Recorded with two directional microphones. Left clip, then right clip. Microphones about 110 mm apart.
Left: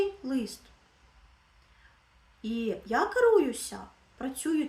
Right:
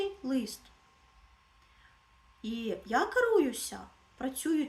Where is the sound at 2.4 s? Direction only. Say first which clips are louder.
Left 4 dB; 20° right (ahead or behind).